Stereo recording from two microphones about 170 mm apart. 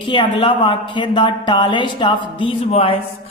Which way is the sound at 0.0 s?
30° left (ahead or behind).